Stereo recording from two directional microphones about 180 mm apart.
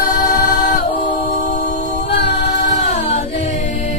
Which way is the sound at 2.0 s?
70° left (ahead or behind).